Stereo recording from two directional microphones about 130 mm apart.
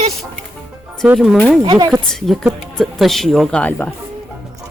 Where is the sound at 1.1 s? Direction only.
5° left (ahead or behind).